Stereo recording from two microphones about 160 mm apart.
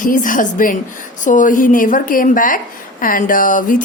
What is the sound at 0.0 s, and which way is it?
A woman's voice, 55° left (ahead or behind).